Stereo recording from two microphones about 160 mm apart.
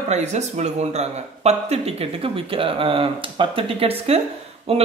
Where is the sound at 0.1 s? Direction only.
45° right (ahead or behind).